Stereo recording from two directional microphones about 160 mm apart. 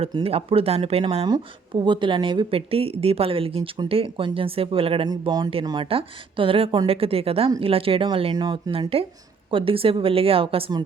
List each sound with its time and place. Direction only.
0.0 s a woman's voice: 35° right (ahead or behind)